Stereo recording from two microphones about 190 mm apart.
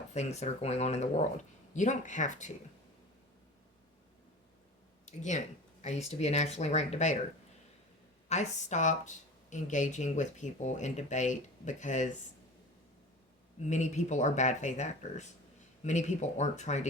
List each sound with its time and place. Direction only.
0.1 s speech: 35° left (ahead or behind)
5.0 s speech: 40° left (ahead or behind)
8.3 s speech: 40° left (ahead or behind)
13.7 s speech: 40° left (ahead or behind)